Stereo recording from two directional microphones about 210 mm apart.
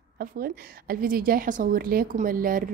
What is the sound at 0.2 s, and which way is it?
A woman's voice, 45° right (ahead or behind).